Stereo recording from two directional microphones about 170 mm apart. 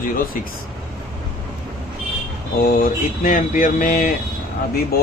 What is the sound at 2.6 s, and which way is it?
Speech, 50° left (ahead or behind).